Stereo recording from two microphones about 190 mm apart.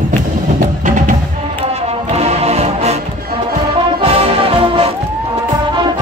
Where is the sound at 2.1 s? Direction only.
35° right (ahead or behind).